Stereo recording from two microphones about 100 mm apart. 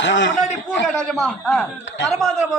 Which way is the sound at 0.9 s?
5° left (ahead or behind).